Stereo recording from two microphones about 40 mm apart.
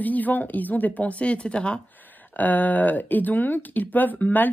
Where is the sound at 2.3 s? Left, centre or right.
Left.